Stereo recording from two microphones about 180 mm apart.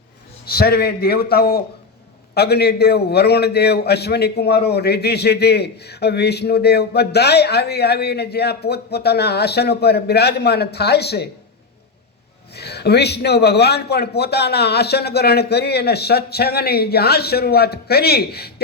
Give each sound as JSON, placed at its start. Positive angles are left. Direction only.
{"t": 0.4, "sound": "a man's voice", "side_deg": 60}
{"t": 12.5, "sound": "a man's voice", "side_deg": 65}